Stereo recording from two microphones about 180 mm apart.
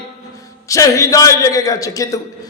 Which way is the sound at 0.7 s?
15° left (ahead or behind).